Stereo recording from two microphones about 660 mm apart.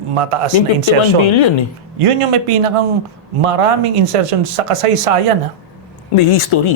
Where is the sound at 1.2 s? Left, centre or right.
Left.